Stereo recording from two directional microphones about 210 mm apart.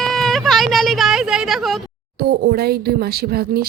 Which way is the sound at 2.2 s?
50° right (ahead or behind).